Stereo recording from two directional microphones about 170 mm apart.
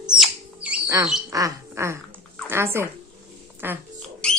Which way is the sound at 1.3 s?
20° right (ahead or behind).